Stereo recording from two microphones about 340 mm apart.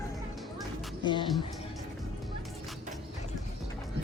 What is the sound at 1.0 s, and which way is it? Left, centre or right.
Speech, centre.